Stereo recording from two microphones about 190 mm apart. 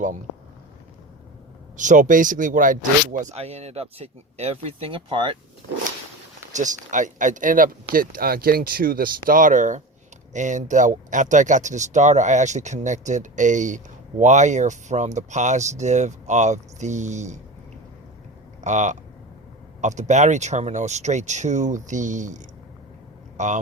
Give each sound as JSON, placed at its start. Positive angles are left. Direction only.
{"t": 1.7, "sound": "speech", "side_deg": -40}
{"t": 6.5, "sound": "speech", "side_deg": -40}
{"t": 18.6, "sound": "speech", "side_deg": -40}
{"t": 23.4, "sound": "speech", "side_deg": -40}